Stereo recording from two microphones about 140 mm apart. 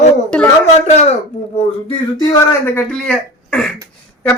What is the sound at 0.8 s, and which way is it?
Speech, 50° left (ahead or behind).